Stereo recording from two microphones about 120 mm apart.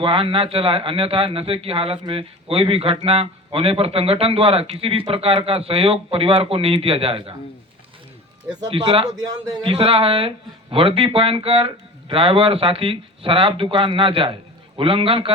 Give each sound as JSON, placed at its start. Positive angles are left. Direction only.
{"t": 0.0, "sound": "speech", "side_deg": -50}
{"t": 8.7, "sound": "speech", "side_deg": -50}
{"t": 9.0, "sound": "speech", "side_deg": -30}
{"t": 9.7, "sound": "speech", "side_deg": -55}